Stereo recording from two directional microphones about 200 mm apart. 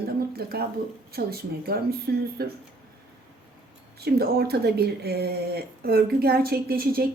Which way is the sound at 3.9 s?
50° right (ahead or behind).